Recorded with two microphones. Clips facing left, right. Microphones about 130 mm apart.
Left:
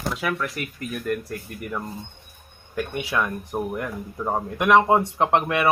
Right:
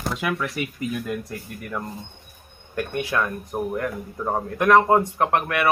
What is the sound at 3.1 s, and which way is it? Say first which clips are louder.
Speech: left 1 dB; 10° left (ahead or behind).